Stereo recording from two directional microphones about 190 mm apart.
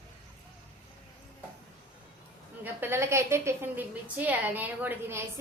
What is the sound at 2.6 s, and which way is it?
A woman's voice, 10° right (ahead or behind).